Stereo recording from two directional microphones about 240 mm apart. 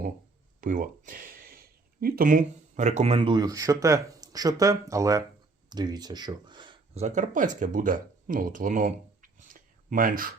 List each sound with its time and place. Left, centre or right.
0.6 s speech: right